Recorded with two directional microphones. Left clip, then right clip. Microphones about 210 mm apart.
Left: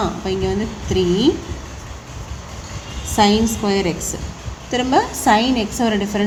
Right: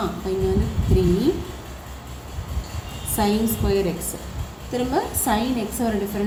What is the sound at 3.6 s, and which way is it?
A woman's voice, 50° left (ahead or behind).